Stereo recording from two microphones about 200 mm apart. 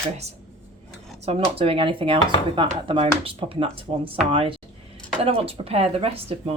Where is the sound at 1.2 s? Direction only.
30° right (ahead or behind).